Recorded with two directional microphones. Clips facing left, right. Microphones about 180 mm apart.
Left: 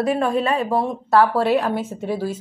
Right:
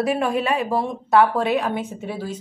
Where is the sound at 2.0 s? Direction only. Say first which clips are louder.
Left 5 dB; 10° left (ahead or behind).